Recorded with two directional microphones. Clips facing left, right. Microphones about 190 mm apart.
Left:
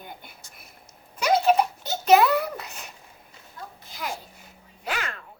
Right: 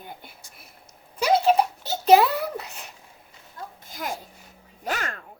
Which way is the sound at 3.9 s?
45° right (ahead or behind).